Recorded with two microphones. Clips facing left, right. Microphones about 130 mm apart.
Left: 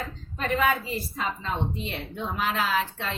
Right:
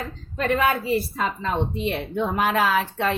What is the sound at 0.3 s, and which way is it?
A woman's voice, 60° right (ahead or behind).